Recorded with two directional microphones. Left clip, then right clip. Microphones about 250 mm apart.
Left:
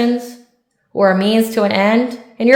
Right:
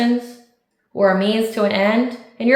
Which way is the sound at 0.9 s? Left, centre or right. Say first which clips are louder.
Left 3 dB; left.